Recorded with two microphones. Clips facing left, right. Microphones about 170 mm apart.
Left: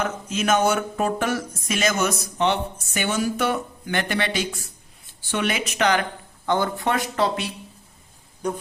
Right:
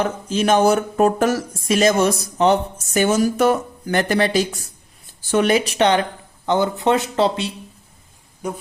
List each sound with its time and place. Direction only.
0.0 s speech: 30° right (ahead or behind)